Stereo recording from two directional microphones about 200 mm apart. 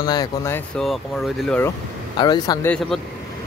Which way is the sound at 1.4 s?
5° left (ahead or behind).